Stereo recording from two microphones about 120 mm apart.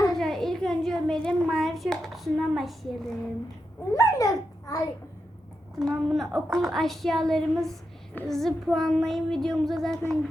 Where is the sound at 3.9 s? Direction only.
30° left (ahead or behind).